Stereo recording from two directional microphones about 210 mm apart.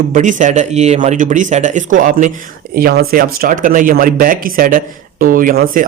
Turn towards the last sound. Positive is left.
turn(degrees=-40)  # may be behind; listen again after turning